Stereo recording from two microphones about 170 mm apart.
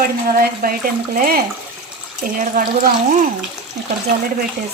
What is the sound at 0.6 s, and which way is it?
Speech, 55° right (ahead or behind).